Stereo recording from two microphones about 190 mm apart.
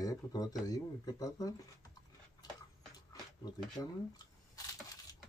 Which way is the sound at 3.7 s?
20° left (ahead or behind).